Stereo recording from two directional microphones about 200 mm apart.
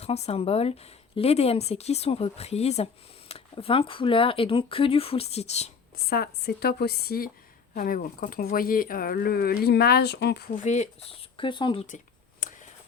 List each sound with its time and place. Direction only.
0.0 s speech: 30° left (ahead or behind)
6.1 s speech: 50° left (ahead or behind); by 11.9 s 25° left (ahead or behind)
12.4 s a sound: 45° left (ahead or behind)